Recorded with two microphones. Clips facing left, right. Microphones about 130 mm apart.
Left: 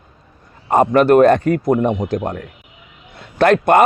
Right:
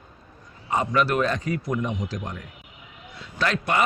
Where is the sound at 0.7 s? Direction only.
50° left (ahead or behind).